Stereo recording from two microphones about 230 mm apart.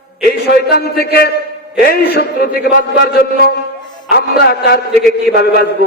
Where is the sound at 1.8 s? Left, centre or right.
Left.